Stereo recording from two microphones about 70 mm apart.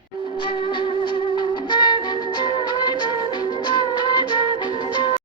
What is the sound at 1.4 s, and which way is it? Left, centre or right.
Music, left.